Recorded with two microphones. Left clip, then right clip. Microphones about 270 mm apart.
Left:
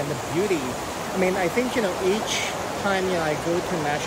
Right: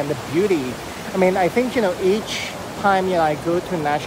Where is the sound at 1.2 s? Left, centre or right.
Right.